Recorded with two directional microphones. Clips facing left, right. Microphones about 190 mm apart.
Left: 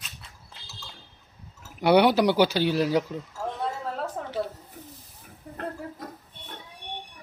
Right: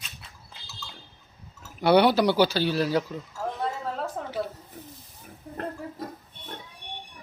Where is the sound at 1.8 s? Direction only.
15° left (ahead or behind).